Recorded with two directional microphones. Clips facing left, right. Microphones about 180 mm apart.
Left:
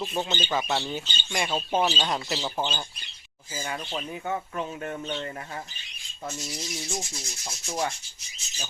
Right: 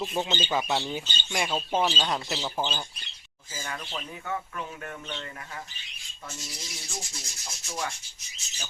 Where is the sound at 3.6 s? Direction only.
20° left (ahead or behind).